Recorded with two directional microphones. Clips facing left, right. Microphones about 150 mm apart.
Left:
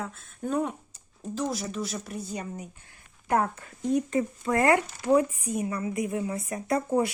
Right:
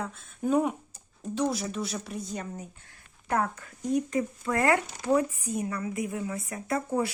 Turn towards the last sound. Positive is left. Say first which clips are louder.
# left 3 dB
turn(degrees=25)  # may be behind; listen again after turning